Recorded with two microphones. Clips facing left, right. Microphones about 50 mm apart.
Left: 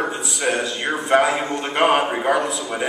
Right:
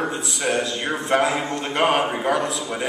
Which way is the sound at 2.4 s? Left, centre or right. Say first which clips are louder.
Left 2 dB; centre.